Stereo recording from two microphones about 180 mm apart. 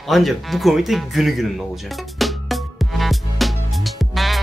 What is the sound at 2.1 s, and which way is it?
Music, centre (ahead or behind).